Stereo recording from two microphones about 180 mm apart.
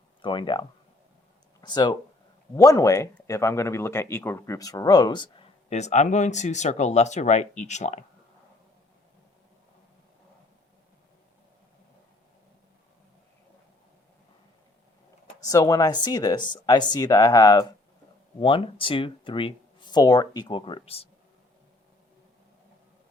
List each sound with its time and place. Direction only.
0.2 s speech: 25° left (ahead or behind)
1.6 s speech: 25° left (ahead or behind); by 8.0 s 40° left (ahead or behind)
15.4 s speech: 20° left (ahead or behind)